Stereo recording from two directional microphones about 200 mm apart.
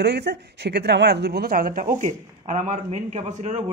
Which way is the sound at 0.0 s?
55° right (ahead or behind).